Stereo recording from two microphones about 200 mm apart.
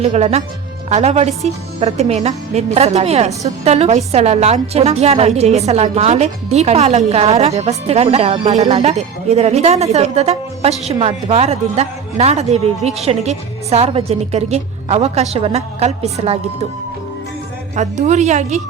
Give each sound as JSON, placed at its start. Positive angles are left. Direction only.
{"t": 0.0, "sound": "a woman's voice", "side_deg": -35}
{"t": 17.7, "sound": "a woman's voice", "side_deg": -35}